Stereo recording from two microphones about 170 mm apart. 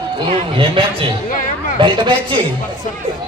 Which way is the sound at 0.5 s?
30° right (ahead or behind).